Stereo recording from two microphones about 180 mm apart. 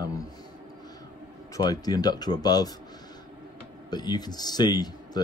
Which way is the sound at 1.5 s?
20° left (ahead or behind).